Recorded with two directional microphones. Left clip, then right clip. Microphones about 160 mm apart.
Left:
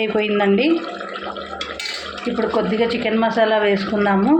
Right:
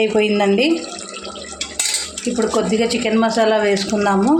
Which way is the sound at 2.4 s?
25° right (ahead or behind).